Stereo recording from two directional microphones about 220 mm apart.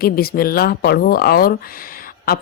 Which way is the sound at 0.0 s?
45° left (ahead or behind).